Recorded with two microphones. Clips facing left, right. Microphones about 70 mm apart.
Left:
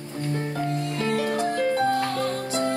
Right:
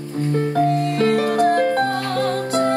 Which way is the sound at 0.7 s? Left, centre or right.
Right.